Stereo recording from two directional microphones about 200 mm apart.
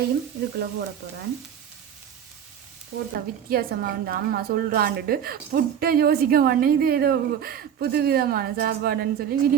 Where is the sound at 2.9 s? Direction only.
55° right (ahead or behind).